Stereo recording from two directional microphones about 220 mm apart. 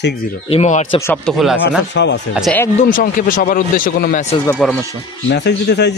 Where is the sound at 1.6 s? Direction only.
55° left (ahead or behind).